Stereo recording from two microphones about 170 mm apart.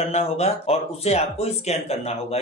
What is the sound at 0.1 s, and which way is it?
Speech, 40° left (ahead or behind).